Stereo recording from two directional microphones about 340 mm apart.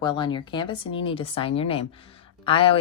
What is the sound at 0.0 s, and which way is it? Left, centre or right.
Speech, centre.